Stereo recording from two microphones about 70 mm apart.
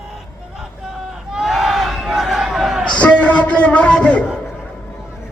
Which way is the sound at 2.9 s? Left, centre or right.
Left.